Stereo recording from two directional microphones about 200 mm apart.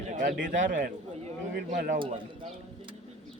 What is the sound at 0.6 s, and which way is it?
Speech, 40° right (ahead or behind).